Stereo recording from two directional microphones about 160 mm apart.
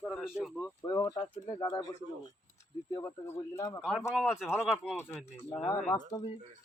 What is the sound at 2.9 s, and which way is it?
Speech, 15° left (ahead or behind).